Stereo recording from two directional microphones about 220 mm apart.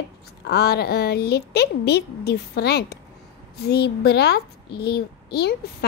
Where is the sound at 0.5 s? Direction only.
45° left (ahead or behind).